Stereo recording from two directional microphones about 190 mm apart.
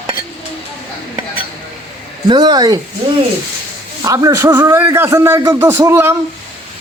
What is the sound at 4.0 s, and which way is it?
A man's voice, 15° right (ahead or behind).